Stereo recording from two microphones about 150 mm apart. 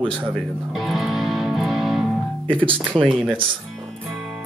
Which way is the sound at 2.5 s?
35° right (ahead or behind).